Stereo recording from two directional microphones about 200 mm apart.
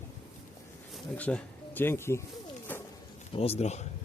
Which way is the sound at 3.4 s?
30° left (ahead or behind).